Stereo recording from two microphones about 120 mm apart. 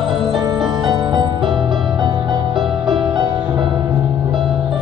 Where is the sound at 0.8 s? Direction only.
40° right (ahead or behind).